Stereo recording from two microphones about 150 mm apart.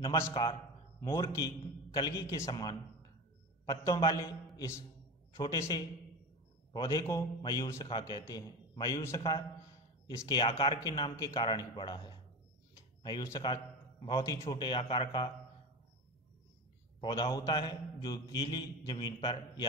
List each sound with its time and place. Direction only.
0.3 s a man's voice: 35° left (ahead or behind); by 4.8 s 20° left (ahead or behind)
6.7 s a man's voice: 25° left (ahead or behind)
17.0 s a man's voice: 30° left (ahead or behind)